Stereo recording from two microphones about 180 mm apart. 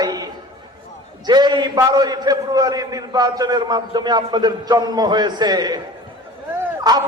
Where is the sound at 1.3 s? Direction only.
25° right (ahead or behind).